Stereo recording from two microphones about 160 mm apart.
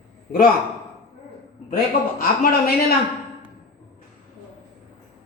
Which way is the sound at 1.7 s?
60° left (ahead or behind).